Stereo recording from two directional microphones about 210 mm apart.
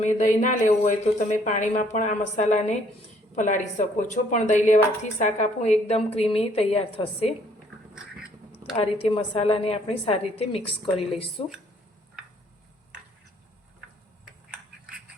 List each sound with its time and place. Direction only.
0.0 s a woman's voice: 35° left (ahead or behind)
7.9 s a sound: 5° right (ahead or behind)
8.7 s a woman's voice: 30° left (ahead or behind)